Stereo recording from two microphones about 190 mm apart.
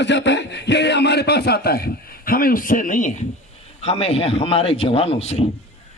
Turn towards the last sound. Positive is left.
turn(degrees=35)  # may be behind; listen again after turning